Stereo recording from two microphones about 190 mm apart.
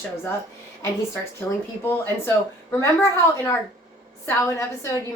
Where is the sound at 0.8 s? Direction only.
15° left (ahead or behind).